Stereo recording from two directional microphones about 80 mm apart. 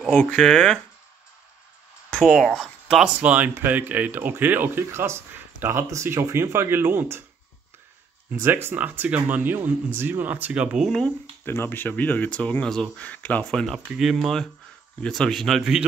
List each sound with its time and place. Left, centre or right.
0.1 s speech: centre
2.0 s speech: centre
2.6 s speech: centre
3.2 s speech: centre
8.4 s speech: right
8.7 s speech: right
10.9 s speech: centre
11.4 s speech: left; by 12.9 s centre
12.9 s speech: centre
13.5 s speech: centre